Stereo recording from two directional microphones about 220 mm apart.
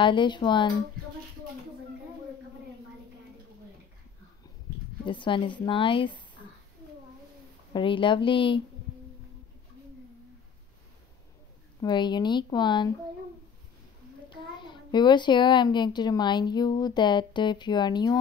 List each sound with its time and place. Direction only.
0.0 s a child's voice: 20° left (ahead or behind)
5.0 s a child's voice: 20° left (ahead or behind)
7.7 s a child's voice: 20° left (ahead or behind)
11.8 s a child's voice: 20° left (ahead or behind)
14.3 s a child's voice: 20° left (ahead or behind)